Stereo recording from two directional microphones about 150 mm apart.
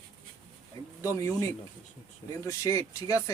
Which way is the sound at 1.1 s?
20° left (ahead or behind).